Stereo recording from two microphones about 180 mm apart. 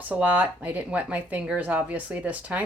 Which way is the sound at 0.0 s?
10° right (ahead or behind).